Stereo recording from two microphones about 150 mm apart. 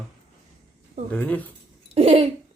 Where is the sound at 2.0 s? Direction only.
40° right (ahead or behind).